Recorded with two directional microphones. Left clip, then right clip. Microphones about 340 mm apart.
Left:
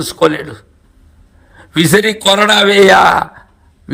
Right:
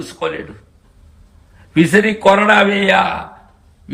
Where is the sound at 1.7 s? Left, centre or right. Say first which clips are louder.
Left 2 dB; centre.